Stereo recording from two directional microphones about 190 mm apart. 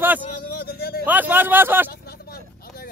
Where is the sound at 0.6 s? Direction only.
55° left (ahead or behind).